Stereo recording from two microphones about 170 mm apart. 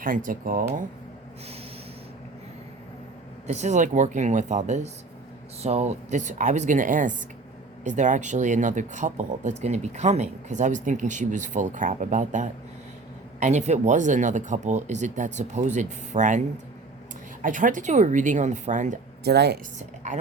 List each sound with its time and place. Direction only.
0.0 s speech: 55° right (ahead or behind)
3.4 s speech: 40° right (ahead or behind)
17.4 s speech: 50° right (ahead or behind)
19.2 s speech: 80° right
20.1 s speech: 45° right (ahead or behind)